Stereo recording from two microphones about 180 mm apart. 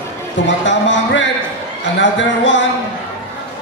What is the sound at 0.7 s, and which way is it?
Speech, 90° left.